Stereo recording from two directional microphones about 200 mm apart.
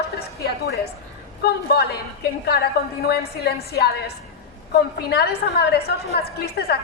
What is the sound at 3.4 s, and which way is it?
A woman's voice, 55° left (ahead or behind).